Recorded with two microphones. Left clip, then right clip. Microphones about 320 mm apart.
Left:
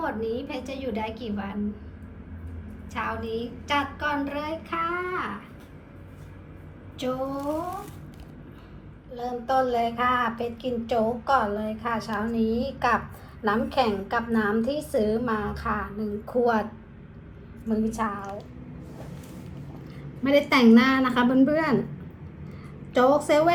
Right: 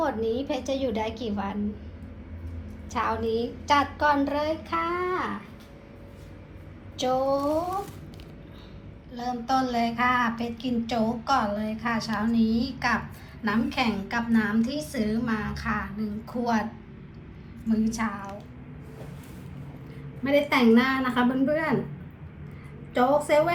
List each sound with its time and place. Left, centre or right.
0.0 s a woman's voice: centre
2.9 s a woman's voice: centre
6.9 s a woman's voice: centre
9.1 s a woman's voice: centre
17.7 s a woman's voice: centre
20.2 s a woman's voice: centre
23.0 s a woman's voice: centre